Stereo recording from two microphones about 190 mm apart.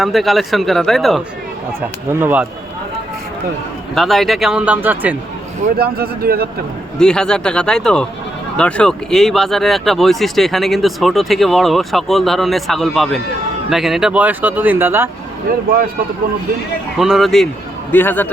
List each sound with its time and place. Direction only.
0.0 s speech: centre (ahead or behind)
2.2 s speech: 10° right (ahead or behind)
3.9 s speech: centre (ahead or behind)
5.7 s speech: 55° right (ahead or behind)
7.0 s speech: 5° left (ahead or behind); by 15.1 s 10° right (ahead or behind)
17.0 s a man's voice: centre (ahead or behind)